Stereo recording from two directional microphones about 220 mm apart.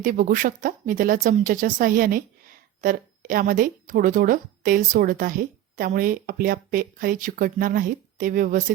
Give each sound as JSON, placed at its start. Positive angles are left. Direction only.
{"t": 0.0, "sound": "speech", "side_deg": -35}